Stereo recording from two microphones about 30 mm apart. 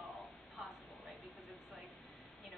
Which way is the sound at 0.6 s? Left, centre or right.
Centre.